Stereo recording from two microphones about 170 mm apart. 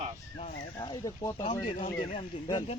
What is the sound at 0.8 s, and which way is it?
Speech, 25° left (ahead or behind).